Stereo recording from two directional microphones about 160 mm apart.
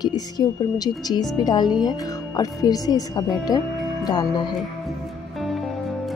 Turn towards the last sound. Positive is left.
turn(degrees=25)  # may be behind; listen again after turning